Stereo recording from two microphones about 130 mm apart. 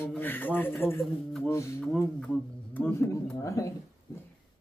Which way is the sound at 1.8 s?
5° left (ahead or behind).